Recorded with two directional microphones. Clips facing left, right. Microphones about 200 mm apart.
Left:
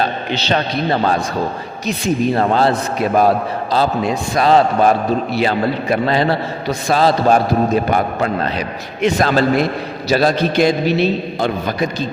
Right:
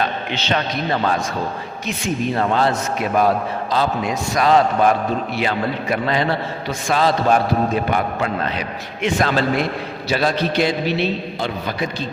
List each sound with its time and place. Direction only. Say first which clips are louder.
0.0 s a man's voice: left 3 dB; 35° left (ahead or behind)